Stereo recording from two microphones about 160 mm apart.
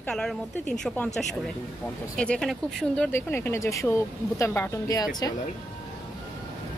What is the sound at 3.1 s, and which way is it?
Speech, 15° left (ahead or behind).